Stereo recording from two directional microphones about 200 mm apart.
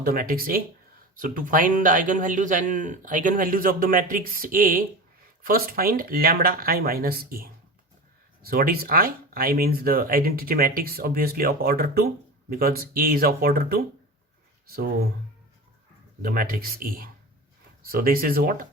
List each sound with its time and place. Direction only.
0.0 s speech: 50° right (ahead or behind)
16.2 s speech: 45° right (ahead or behind)